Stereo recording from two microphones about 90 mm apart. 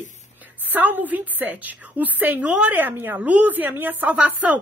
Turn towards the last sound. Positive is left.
turn(degrees=-15)  # may be behind; listen again after turning